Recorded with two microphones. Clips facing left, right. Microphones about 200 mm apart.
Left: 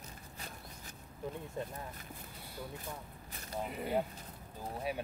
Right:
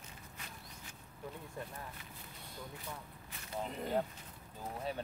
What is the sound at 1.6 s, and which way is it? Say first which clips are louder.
Speech: left 5 dB; 20° left (ahead or behind).